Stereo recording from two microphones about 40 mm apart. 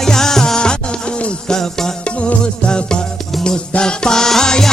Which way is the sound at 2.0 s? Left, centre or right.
Left.